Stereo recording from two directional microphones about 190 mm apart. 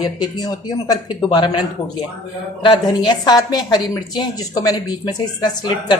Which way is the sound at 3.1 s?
20° left (ahead or behind).